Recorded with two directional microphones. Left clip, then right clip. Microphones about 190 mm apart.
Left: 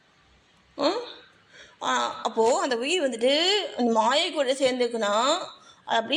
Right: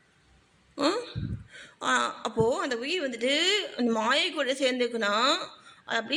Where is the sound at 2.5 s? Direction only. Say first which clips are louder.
Left 5 dB; 5° right (ahead or behind).